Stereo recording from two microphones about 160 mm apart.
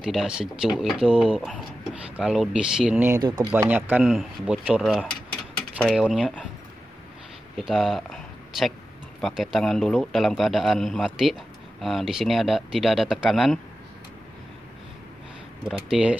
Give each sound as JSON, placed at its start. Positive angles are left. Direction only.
{"t": 0.0, "sound": "a man's voice", "side_deg": -5}
{"t": 3.2, "sound": "speech", "side_deg": -25}
{"t": 3.5, "sound": "a man's voice", "side_deg": -15}
{"t": 7.5, "sound": "a man's voice", "side_deg": 0}
{"t": 15.9, "sound": "speech", "side_deg": -5}